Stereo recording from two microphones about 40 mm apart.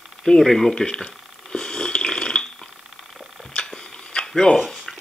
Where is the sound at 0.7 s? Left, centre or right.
Centre.